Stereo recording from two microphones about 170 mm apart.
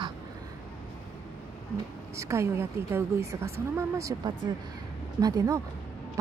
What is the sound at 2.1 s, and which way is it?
A woman's voice, 15° right (ahead or behind).